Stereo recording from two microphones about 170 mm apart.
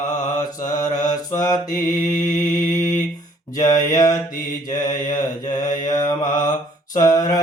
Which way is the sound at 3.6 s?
20° left (ahead or behind).